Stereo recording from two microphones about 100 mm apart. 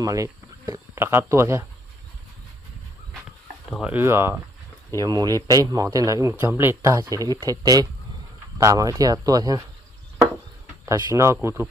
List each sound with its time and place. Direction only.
0.0 s speech: 35° right (ahead or behind)
3.8 s speech: 20° right (ahead or behind)
5.0 s speech: 40° right (ahead or behind); by 6.9 s 25° right (ahead or behind)
6.9 s speech: 35° right (ahead or behind)
10.9 s speech: 35° right (ahead or behind)